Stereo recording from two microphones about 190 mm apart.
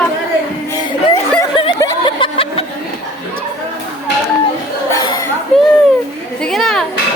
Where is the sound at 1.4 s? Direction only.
20° left (ahead or behind).